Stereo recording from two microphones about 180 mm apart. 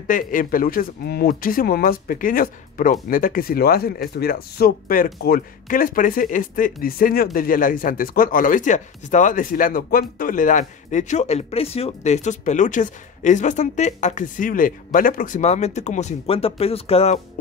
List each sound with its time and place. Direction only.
0.0 s speech: 50° left (ahead or behind); by 17.1 s 35° left (ahead or behind)